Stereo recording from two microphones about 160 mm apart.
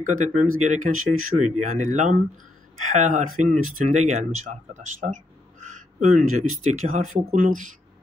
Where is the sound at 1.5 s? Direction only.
50° right (ahead or behind).